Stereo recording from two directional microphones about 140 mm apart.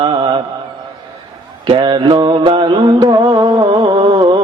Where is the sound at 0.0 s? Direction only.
35° right (ahead or behind).